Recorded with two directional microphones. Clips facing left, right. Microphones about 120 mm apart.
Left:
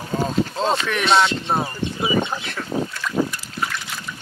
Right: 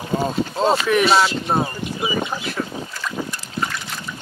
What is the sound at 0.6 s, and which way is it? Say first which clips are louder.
Speech: right 4 dB; 5° right (ahead or behind).